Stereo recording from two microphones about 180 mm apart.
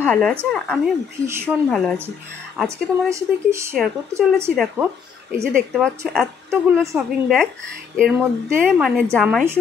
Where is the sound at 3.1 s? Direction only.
15° right (ahead or behind).